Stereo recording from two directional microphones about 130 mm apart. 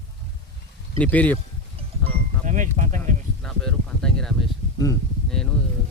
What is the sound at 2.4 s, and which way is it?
Speech, 80° right.